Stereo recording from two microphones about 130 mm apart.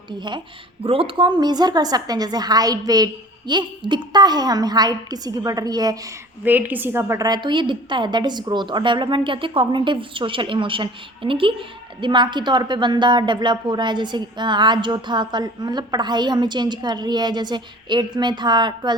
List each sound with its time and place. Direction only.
0.2 s a woman's voice: 35° right (ahead or behind)
6.4 s a woman's voice: 15° right (ahead or behind); by 18.9 s 35° right (ahead or behind)